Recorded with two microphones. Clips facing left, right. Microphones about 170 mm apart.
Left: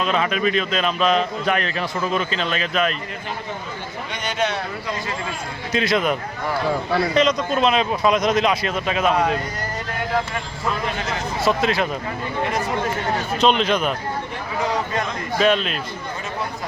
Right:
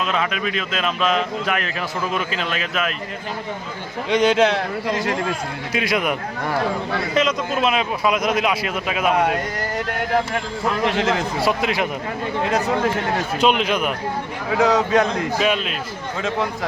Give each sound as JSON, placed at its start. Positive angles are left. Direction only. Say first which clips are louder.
{"t": 0.0, "sound": "speech", "louder": "left 2 dB", "side_deg": 0}
{"t": 4.1, "sound": "a man's voice", "louder": "right 9 dB", "side_deg": -90}
{"t": 5.7, "sound": "speech", "louder": "left 2 dB", "side_deg": -10}
{"t": 10.8, "sound": "a man's voice", "louder": "right 6 dB", "side_deg": -90}
{"t": 11.4, "sound": "speech", "louder": "left 2 dB", "side_deg": -15}
{"t": 13.4, "sound": "speech", "louder": "left 1 dB", "side_deg": -10}
{"t": 14.5, "sound": "a man's voice", "louder": "right 7 dB", "side_deg": -90}
{"t": 15.4, "sound": "speech", "louder": "left 6 dB", "side_deg": -5}